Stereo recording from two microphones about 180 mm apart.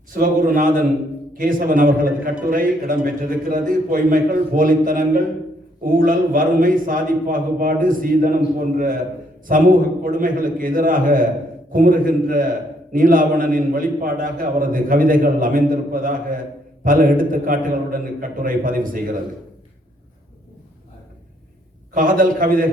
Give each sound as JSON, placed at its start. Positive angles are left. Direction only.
{"t": 0.1, "sound": "a man's voice", "side_deg": -50}
{"t": 21.9, "sound": "a man's voice", "side_deg": -50}